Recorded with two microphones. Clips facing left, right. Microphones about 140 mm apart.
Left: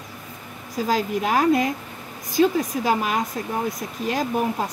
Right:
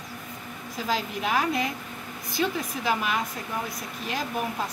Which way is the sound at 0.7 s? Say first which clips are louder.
Left 7 dB; 40° left (ahead or behind).